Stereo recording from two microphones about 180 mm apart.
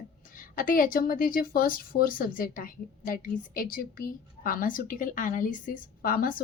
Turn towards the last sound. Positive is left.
turn(degrees=50)  # may be behind; listen again after turning